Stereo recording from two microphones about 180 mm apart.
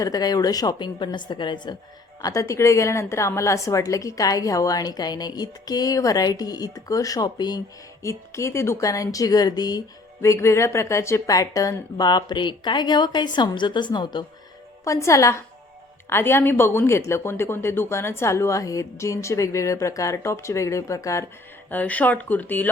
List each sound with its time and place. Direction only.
0.0 s a woman's voice: 20° left (ahead or behind)